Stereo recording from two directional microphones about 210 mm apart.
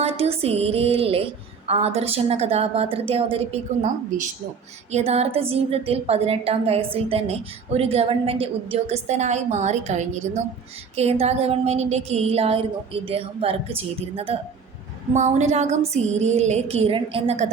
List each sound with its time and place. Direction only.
0.0 s a woman's voice: 30° right (ahead or behind)
4.9 s a woman's voice: 30° right (ahead or behind)